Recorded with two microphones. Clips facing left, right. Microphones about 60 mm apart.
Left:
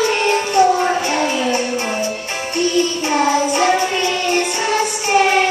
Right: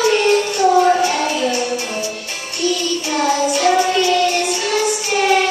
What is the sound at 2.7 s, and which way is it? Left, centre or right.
Music, left.